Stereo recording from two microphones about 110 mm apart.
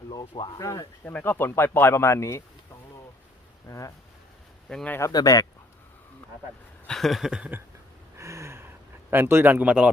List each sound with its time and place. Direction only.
0.1 s speech: 45° left (ahead or behind)
0.6 s speech: 30° left (ahead or behind)
1.0 s speech: 15° left (ahead or behind)
3.7 s speech: 30° left (ahead or behind)
4.7 s a man's voice: 10° left (ahead or behind)
4.9 s speech: 30° left (ahead or behind)
6.8 s a sound: 5° left (ahead or behind)
8.1 s a sound: 25° right (ahead or behind); by 9.9 s 10° right (ahead or behind)